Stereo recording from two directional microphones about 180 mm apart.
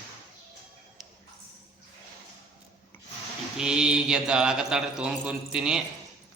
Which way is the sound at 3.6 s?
5° right (ahead or behind).